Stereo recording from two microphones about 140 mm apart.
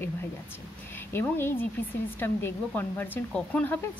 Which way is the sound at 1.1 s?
15° left (ahead or behind).